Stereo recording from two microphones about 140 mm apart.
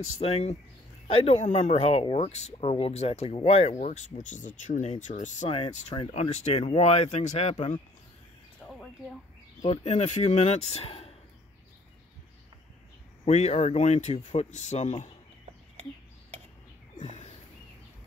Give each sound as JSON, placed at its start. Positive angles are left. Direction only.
{"t": 0.2, "sound": "speech", "side_deg": 45}
{"t": 5.5, "sound": "speech", "side_deg": 45}
{"t": 9.8, "sound": "speech", "side_deg": 55}
{"t": 13.2, "sound": "speech", "side_deg": 50}
{"t": 16.9, "sound": "a sound", "side_deg": 60}